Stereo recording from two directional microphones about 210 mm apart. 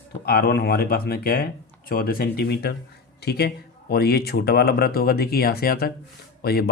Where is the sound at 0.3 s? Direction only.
45° left (ahead or behind).